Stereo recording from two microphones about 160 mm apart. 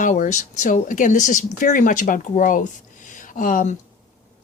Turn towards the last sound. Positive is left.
turn(degrees=55)  # may be behind; listen again after turning